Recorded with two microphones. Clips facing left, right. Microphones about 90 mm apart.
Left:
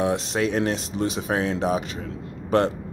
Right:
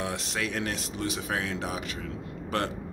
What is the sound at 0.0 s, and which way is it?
Speech, 25° left (ahead or behind).